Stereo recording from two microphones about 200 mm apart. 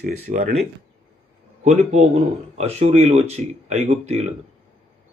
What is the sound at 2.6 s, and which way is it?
Speech, 35° right (ahead or behind).